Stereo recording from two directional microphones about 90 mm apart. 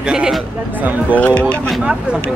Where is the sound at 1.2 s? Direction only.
15° left (ahead or behind).